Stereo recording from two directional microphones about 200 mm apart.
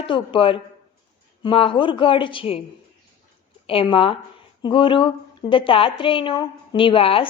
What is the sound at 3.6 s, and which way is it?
A woman's voice, 25° left (ahead or behind).